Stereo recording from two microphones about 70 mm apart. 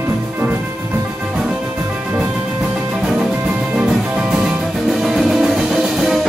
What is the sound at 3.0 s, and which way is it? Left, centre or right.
Music, centre.